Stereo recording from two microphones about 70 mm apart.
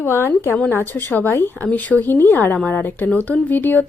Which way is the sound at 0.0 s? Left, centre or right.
Left.